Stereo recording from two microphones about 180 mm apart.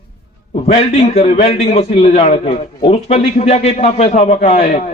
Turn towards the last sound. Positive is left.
turn(degrees=40)  # may be behind; listen again after turning